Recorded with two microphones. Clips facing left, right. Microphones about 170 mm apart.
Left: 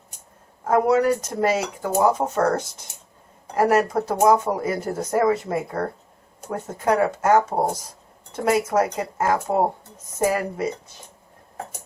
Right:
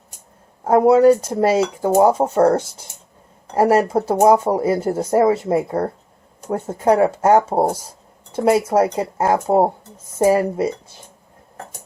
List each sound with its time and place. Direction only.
0.7 s speech: 30° right (ahead or behind)